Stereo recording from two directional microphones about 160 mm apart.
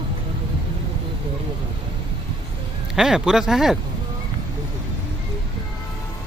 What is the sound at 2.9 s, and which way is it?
Speech, 5° right (ahead or behind).